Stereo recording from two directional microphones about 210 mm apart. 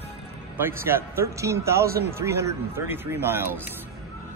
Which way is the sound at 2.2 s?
15° right (ahead or behind).